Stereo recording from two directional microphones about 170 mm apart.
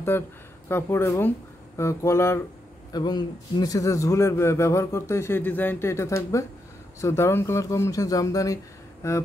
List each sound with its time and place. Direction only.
0.1 s a man's voice: 15° left (ahead or behind)